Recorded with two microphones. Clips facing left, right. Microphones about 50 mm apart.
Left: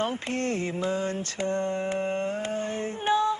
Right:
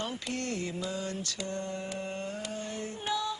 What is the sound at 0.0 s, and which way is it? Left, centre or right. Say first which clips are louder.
Mantra: left 7 dB; left.